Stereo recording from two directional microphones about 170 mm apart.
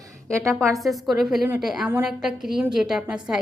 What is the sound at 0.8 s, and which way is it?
A woman's voice, centre (ahead or behind).